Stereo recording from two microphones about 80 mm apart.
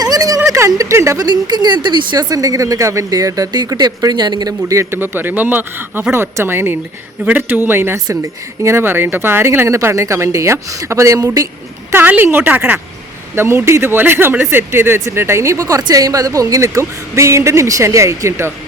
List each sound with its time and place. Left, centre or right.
0.0 s a sound: right
0.4 s a sound: right
0.7 s a woman's voice: right
1.2 s speech: right
2.3 s speech: right
4.7 s speech: right
7.9 s a woman's voice: right
11.9 s a woman's voice: right